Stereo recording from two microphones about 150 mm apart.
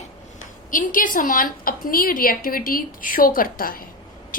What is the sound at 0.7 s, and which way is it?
A woman's voice, 65° left (ahead or behind).